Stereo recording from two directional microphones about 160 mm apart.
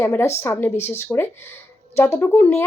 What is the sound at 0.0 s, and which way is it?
A woman's voice, 15° left (ahead or behind).